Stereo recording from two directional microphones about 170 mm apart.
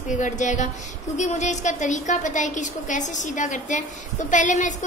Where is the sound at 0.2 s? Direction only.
45° left (ahead or behind).